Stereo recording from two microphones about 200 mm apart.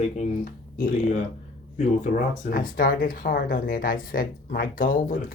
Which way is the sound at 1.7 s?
35° left (ahead or behind).